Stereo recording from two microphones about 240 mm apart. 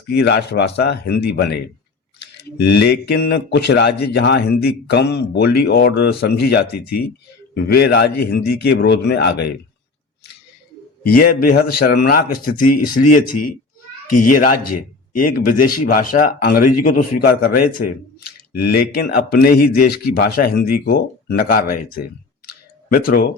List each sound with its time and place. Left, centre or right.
0.2 s a man's voice: left
11.0 s a man's voice: left
13.3 s speech: left
14.3 s a man's voice: left
18.3 s a sound: left
18.7 s a man's voice: left
22.4 s clicking: left